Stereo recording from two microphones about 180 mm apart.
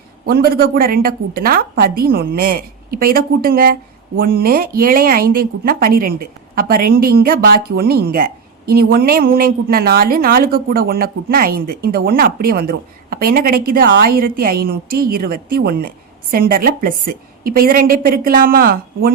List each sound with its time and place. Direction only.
0.3 s a woman's voice: 55° right (ahead or behind)